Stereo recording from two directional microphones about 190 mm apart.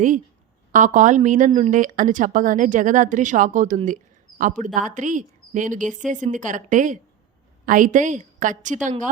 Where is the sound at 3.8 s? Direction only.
45° right (ahead or behind).